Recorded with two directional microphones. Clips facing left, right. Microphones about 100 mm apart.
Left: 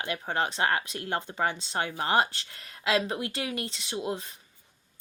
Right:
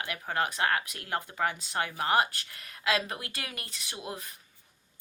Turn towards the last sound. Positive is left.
turn(degrees=25)  # may be behind; listen again after turning